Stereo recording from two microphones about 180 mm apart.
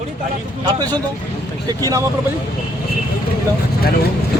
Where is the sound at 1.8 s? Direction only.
20° right (ahead or behind).